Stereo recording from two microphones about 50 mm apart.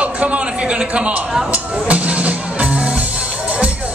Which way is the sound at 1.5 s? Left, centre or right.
Right.